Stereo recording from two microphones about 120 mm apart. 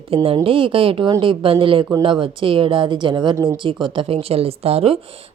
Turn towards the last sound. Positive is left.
turn(degrees=-55)  # may be behind; listen again after turning